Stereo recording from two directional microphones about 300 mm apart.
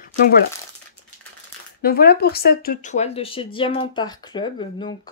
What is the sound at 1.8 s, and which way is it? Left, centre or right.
Speech, left.